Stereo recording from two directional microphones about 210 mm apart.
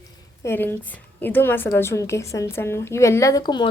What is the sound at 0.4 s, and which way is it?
A woman's voice, 10° left (ahead or behind).